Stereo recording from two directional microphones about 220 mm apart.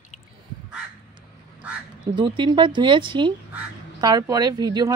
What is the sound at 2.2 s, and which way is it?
Speech, 20° right (ahead or behind).